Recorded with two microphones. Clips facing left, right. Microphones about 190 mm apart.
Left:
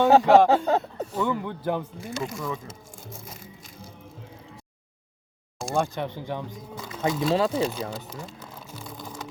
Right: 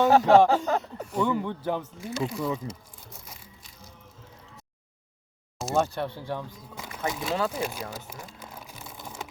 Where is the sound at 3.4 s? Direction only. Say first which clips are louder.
Left 7 dB; 45° left (ahead or behind).